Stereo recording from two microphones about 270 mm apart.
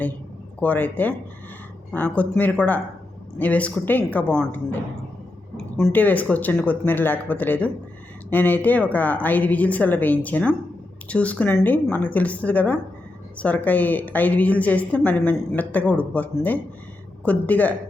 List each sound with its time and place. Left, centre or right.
0.6 s a woman's voice: centre